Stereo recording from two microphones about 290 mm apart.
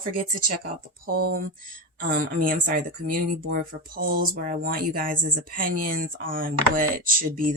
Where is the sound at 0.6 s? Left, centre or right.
Right.